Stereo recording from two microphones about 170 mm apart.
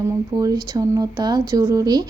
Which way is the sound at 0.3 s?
20° right (ahead or behind).